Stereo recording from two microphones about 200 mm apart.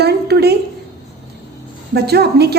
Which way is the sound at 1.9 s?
55° right (ahead or behind).